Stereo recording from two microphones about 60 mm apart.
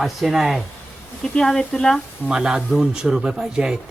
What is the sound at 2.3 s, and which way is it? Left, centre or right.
A man's voice, centre.